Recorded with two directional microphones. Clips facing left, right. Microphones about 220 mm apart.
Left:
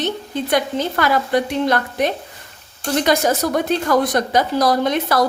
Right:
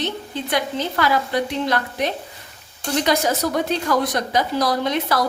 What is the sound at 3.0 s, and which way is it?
A woman's voice, 50° left (ahead or behind).